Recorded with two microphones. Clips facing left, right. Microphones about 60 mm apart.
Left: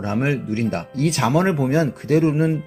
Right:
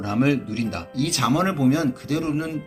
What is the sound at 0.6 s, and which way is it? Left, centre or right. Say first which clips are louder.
Speech: left 4 dB; left.